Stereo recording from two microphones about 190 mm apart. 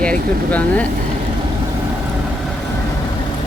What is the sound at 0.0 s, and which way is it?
Speech, 5° left (ahead or behind).